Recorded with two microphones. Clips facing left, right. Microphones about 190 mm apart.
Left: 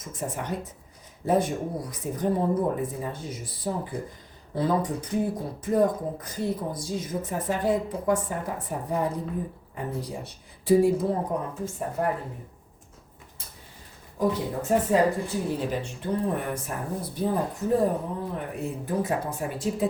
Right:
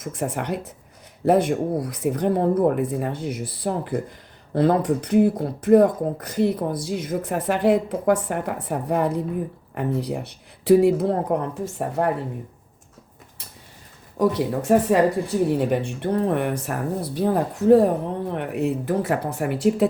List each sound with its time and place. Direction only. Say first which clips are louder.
0.0 s speech: right 6 dB; 70° right (ahead or behind)
14.2 s speech: right 5 dB; 75° right (ahead or behind)
15.5 s speech: right 7 dB; 60° right (ahead or behind)